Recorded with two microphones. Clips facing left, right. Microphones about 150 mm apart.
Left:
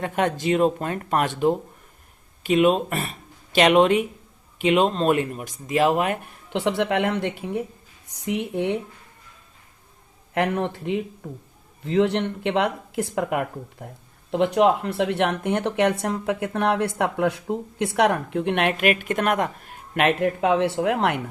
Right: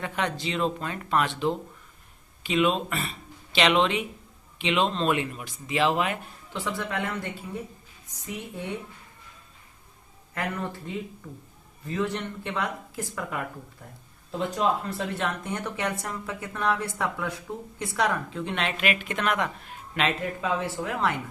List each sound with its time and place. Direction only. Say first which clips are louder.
0.0 s speech: left 6 dB; 45° left (ahead or behind)
6.5 s speech: left 9 dB; 70° left (ahead or behind)
10.3 s speech: left 8 dB; 70° left (ahead or behind)
14.3 s speech: left 8 dB; 70° left (ahead or behind)